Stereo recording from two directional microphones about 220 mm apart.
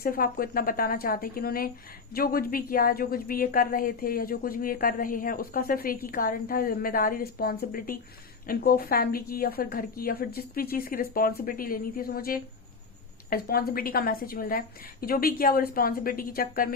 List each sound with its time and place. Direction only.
0.0 s a woman's voice: 40° left (ahead or behind)